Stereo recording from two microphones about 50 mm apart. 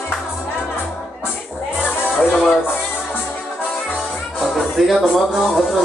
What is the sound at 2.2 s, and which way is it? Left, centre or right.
Music, left.